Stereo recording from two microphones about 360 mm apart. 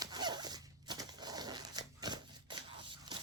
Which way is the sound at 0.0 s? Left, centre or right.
Centre.